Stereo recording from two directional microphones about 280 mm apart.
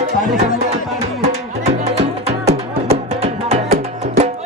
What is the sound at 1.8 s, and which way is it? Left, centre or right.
Music, right.